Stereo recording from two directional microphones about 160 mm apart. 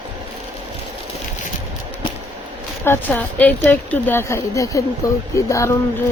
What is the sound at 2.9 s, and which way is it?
Speech, 10° left (ahead or behind).